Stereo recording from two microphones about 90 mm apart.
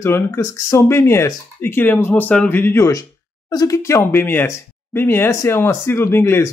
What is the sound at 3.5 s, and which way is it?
Speech, 50° left (ahead or behind).